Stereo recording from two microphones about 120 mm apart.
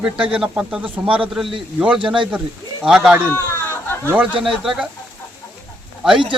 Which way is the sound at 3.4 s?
20° left (ahead or behind).